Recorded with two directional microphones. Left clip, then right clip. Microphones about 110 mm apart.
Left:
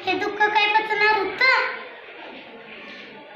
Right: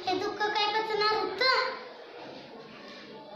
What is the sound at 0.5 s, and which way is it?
Child singing, 40° right (ahead or behind).